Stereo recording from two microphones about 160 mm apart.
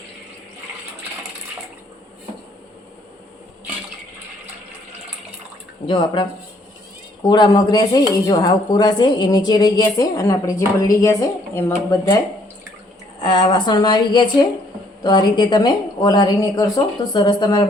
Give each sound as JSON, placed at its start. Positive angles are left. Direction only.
{"t": 5.8, "sound": "speech", "side_deg": 30}
{"t": 13.2, "sound": "speech", "side_deg": 30}